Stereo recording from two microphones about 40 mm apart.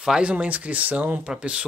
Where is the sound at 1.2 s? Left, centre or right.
Right.